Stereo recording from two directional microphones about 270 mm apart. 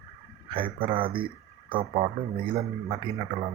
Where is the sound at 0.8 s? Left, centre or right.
Centre.